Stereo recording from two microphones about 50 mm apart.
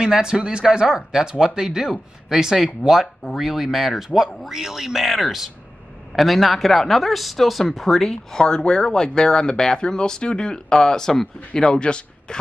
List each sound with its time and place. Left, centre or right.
0.0 s speech: centre
8.1 s speech: centre